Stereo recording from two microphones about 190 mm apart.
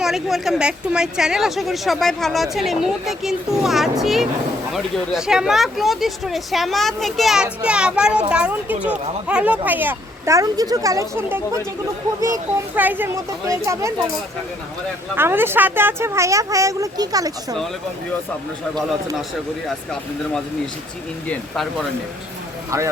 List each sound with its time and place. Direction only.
0.0 s a woman's voice: centre (ahead or behind)
15.1 s speech: 10° right (ahead or behind)
19.6 s a woman's voice: 5° left (ahead or behind)